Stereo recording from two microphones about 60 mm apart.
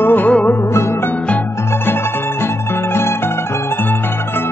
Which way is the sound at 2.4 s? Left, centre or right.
Left.